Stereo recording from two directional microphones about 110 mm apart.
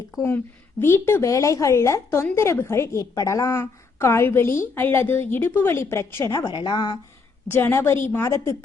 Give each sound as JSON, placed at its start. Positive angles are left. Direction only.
{"t": 0.8, "sound": "a woman's voice", "side_deg": 25}
{"t": 6.5, "sound": "a woman's voice", "side_deg": 45}
{"t": 7.4, "sound": "a woman's voice", "side_deg": 20}